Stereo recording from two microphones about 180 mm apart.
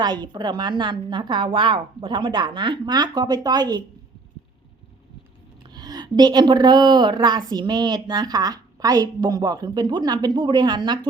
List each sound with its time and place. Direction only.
0.0 s a woman's voice: 25° right (ahead or behind)
5.7 s a woman's voice: 20° right (ahead or behind)